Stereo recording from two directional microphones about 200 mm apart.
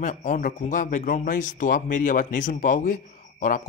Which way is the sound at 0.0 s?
40° left (ahead or behind).